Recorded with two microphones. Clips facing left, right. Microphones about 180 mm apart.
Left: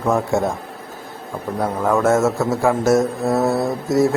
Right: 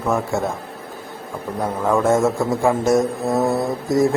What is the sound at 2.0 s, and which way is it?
Speech, 10° right (ahead or behind).